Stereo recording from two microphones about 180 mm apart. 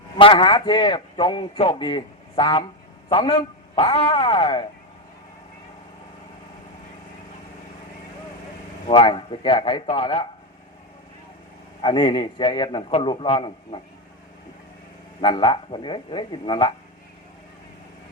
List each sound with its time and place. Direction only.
0.2 s a man's voice: 30° left (ahead or behind)
8.9 s a man's voice: 30° left (ahead or behind)
11.8 s a man's voice: 25° left (ahead or behind)
15.2 s a man's voice: 25° left (ahead or behind)